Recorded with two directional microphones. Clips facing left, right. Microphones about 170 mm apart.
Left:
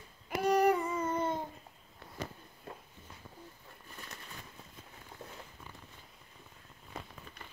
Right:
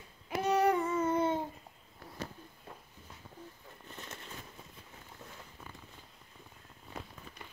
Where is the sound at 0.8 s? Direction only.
10° left (ahead or behind).